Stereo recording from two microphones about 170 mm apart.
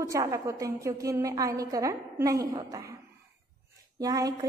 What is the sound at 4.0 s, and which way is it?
Speech, 20° right (ahead or behind).